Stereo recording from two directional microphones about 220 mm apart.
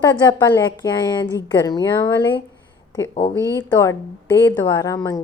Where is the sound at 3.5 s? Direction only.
15° left (ahead or behind).